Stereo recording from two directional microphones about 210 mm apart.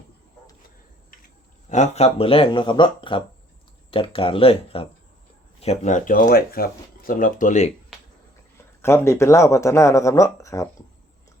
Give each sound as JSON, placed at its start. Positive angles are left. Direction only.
{"t": 1.7, "sound": "speech", "side_deg": 30}
{"t": 8.8, "sound": "speech", "side_deg": 10}